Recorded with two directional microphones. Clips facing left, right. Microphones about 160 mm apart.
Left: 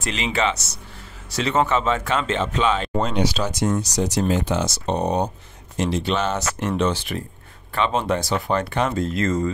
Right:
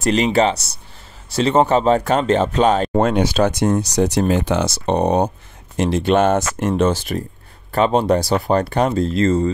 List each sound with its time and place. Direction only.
0.0 s speech: 40° right (ahead or behind)